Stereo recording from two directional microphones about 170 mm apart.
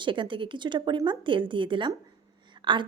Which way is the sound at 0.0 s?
30° right (ahead or behind).